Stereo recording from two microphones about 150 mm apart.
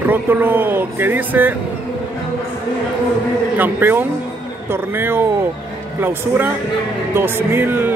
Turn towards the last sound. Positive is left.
turn(degrees=-15)  # may be behind; listen again after turning